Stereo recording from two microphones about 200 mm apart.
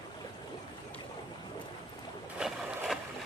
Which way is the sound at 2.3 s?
5° right (ahead or behind).